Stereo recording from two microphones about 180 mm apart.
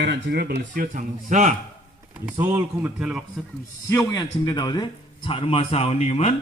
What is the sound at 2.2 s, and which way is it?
Speech, 10° right (ahead or behind).